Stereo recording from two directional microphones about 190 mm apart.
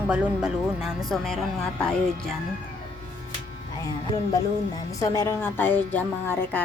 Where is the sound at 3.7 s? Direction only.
20° left (ahead or behind).